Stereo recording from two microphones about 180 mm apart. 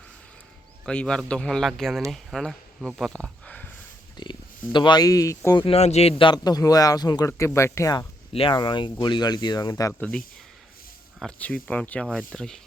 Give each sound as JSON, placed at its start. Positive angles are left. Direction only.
{"t": 0.9, "sound": "a man's voice", "side_deg": 5}
{"t": 4.2, "sound": "speech", "side_deg": 25}
{"t": 5.5, "sound": "a man's voice", "side_deg": 35}
{"t": 8.3, "sound": "a man's voice", "side_deg": 30}
{"t": 11.2, "sound": "speech", "side_deg": 5}